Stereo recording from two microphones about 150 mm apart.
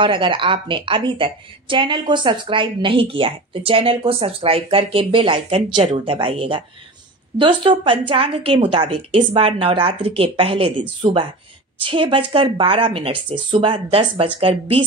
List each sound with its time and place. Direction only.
0.0 s a woman's voice: 35° right (ahead or behind)